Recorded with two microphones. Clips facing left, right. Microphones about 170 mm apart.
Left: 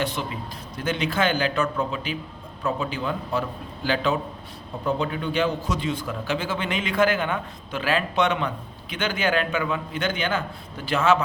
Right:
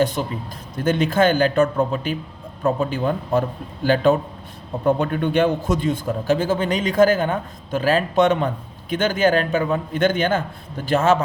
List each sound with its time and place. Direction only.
0.0 s a man's voice: 45° right (ahead or behind)